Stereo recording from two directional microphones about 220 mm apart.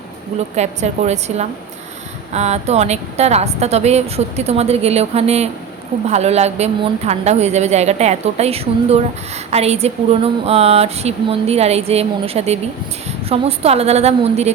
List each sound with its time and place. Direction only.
0.3 s a woman's voice: 30° right (ahead or behind)